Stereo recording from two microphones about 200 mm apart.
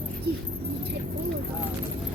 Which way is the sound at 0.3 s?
55° right (ahead or behind).